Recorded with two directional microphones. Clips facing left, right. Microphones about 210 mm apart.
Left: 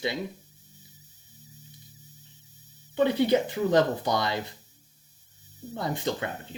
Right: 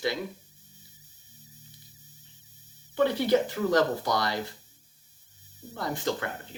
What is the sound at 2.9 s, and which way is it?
Speech, 20° left (ahead or behind).